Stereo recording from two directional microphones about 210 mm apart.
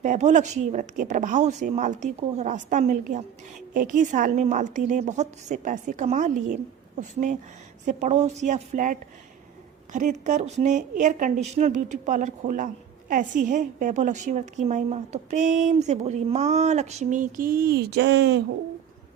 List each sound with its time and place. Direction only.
0.0 s a woman's voice: 35° right (ahead or behind); by 18.4 s 50° right (ahead or behind)